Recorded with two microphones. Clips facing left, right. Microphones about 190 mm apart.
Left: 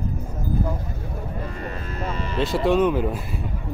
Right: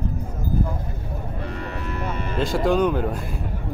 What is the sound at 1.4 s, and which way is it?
Speech, 70° right (ahead or behind).